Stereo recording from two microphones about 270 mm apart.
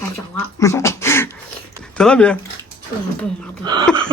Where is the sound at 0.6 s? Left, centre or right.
Centre.